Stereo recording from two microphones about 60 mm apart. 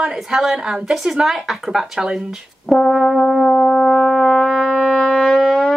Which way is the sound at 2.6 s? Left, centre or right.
Centre.